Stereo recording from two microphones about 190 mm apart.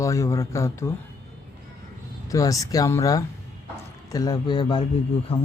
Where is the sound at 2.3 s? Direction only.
15° left (ahead or behind).